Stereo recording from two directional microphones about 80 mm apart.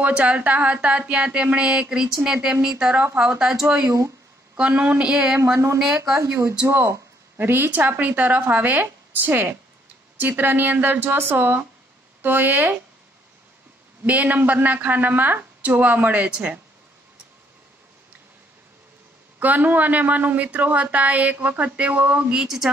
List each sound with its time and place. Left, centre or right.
0.0 s a sound: centre
5.8 s speech: centre
6.7 s speech: right
14.0 s speech: centre
19.4 s speech: right